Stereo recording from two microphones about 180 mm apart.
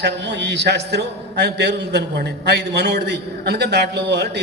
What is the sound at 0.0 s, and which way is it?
A man's voice, 75° right (ahead or behind).